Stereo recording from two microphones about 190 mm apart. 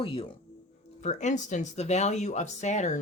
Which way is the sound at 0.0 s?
30° left (ahead or behind).